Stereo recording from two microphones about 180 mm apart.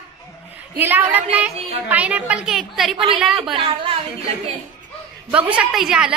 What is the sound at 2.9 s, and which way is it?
A woman's voice, 30° right (ahead or behind).